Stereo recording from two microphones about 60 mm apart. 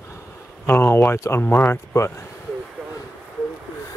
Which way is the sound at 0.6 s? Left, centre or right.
Left.